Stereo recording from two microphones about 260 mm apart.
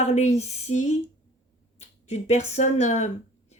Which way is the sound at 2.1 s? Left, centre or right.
Left.